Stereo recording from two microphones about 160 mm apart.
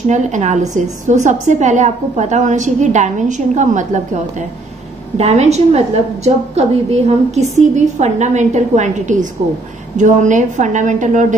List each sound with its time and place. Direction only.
0.1 s a woman's voice: 45° right (ahead or behind)